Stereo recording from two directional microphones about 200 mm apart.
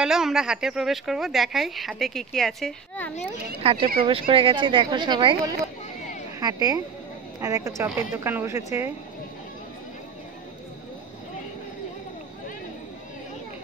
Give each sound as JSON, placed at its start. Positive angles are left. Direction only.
{"t": 0.0, "sound": "a woman's voice", "side_deg": -5}
{"t": 3.6, "sound": "speech", "side_deg": -30}